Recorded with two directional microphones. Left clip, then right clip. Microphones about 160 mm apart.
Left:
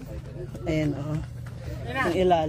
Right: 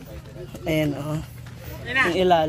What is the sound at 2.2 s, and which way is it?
Speech, 45° right (ahead or behind).